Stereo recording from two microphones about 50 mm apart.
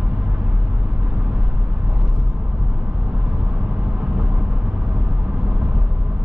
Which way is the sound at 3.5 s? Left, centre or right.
Right.